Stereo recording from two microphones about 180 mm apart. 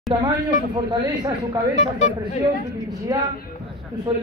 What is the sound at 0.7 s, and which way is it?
Speech, 25° right (ahead or behind).